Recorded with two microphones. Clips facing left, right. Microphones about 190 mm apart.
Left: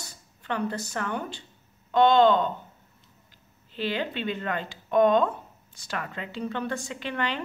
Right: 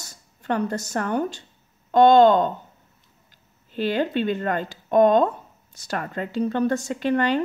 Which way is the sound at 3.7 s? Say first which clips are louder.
Right 7 dB; 45° right (ahead or behind).